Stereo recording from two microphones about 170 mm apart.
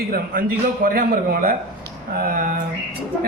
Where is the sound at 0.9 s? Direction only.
60° right (ahead or behind).